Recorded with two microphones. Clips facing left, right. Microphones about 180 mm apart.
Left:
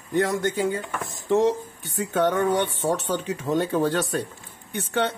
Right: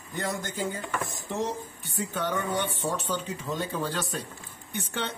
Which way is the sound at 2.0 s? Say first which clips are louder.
Left 8 dB; 70° left (ahead or behind).